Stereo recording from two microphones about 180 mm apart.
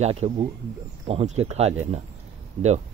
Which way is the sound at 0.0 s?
35° right (ahead or behind).